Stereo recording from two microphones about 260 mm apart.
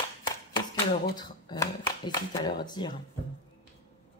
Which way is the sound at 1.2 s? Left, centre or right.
Centre.